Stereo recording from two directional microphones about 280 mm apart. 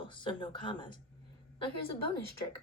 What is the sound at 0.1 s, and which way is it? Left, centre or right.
Speech, centre.